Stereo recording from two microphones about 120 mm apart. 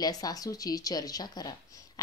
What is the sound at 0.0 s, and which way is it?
A woman's voice, 30° left (ahead or behind).